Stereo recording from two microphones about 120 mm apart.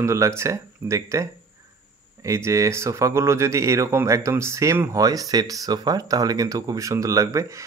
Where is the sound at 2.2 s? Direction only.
25° right (ahead or behind).